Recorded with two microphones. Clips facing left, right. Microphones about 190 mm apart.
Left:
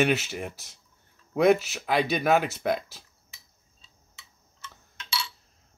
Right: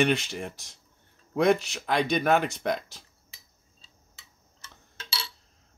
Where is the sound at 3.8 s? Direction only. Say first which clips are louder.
Left 2 dB; 35° right (ahead or behind).